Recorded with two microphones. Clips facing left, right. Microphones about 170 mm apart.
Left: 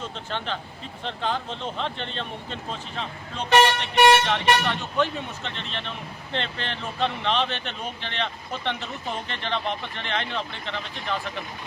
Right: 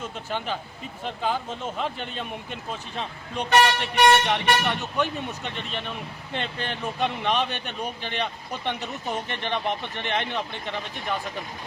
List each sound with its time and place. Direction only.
0.0 s speech: 10° right (ahead or behind)